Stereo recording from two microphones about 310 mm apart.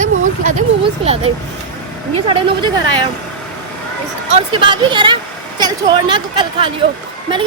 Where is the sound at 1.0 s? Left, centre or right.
Centre.